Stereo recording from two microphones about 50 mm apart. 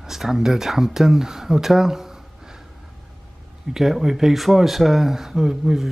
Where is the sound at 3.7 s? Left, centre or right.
Centre.